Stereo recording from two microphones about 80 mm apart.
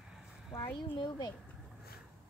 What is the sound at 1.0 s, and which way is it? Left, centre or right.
Speech, left.